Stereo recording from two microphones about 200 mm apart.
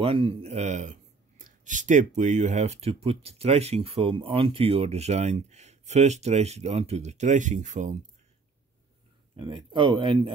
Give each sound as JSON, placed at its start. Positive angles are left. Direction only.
{"t": 0.0, "sound": "speech", "side_deg": -30}
{"t": 9.4, "sound": "speech", "side_deg": -25}